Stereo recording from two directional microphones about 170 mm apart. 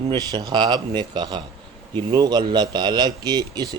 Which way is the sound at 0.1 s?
25° right (ahead or behind).